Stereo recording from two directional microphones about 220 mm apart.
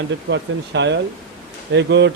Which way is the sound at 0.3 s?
55° right (ahead or behind).